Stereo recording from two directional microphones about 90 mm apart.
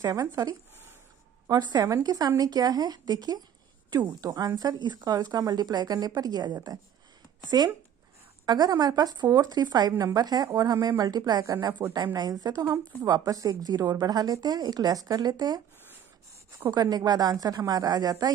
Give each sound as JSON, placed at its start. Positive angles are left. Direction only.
{"t": 0.0, "sound": "speech", "side_deg": -45}
{"t": 16.7, "sound": "speech", "side_deg": -50}